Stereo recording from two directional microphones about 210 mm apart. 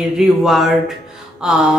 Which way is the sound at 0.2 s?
Centre (ahead or behind).